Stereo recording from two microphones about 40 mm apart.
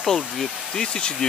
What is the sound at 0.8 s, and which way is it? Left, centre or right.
Speech, centre.